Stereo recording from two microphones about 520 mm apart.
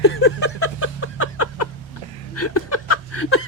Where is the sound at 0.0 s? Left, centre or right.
Left.